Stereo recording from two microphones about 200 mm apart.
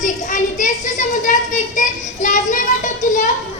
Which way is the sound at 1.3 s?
40° left (ahead or behind).